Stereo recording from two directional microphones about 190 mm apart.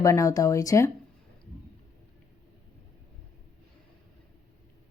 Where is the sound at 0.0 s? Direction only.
15° left (ahead or behind).